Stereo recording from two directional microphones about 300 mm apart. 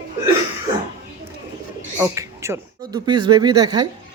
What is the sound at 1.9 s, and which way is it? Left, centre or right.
Speech, centre.